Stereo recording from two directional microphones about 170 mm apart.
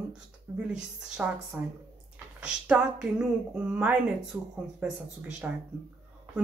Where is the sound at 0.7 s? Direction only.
5° right (ahead or behind).